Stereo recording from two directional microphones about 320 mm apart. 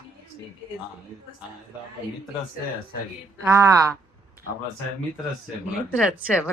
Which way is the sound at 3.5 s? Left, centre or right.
Centre.